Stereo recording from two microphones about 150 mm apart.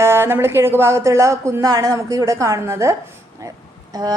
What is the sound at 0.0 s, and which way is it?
A woman's voice, 15° right (ahead or behind).